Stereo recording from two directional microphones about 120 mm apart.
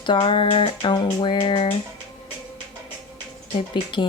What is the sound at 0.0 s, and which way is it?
Speech, 45° left (ahead or behind).